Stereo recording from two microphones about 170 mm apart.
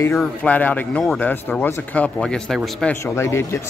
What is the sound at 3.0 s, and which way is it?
Speech, 15° left (ahead or behind).